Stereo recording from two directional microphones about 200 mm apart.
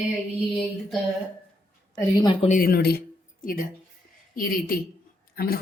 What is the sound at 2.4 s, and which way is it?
Speech, 40° left (ahead or behind).